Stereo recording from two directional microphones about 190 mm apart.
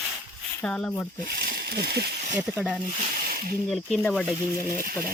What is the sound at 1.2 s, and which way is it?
Speech, 50° right (ahead or behind).